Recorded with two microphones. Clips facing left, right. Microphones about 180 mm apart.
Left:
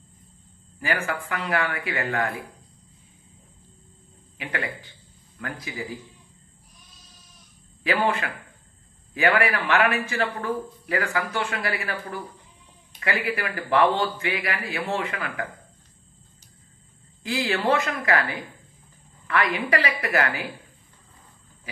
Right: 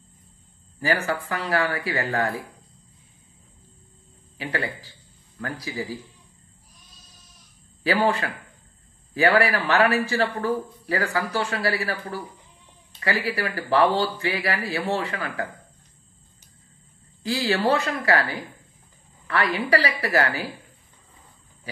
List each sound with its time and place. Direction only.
0.7 s a man's voice: 35° right (ahead or behind)
4.4 s a man's voice: 35° right (ahead or behind)
7.8 s a man's voice: 35° right (ahead or behind)
17.2 s a man's voice: 35° right (ahead or behind)